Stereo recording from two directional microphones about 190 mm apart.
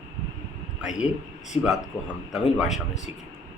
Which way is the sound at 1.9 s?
Centre (ahead or behind).